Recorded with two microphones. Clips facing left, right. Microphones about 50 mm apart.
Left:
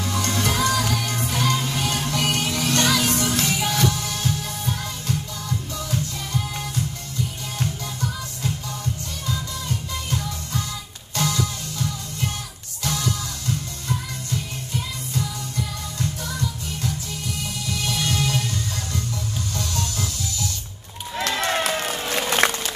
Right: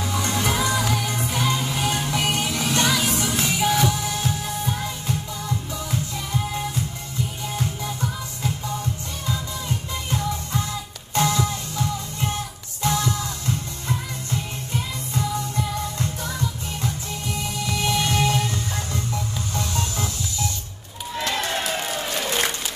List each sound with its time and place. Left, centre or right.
0.0 s music: centre
22.1 s music: left